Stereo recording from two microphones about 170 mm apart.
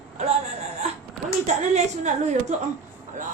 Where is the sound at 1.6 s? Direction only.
40° right (ahead or behind).